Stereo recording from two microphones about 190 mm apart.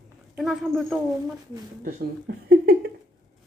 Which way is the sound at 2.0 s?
55° right (ahead or behind).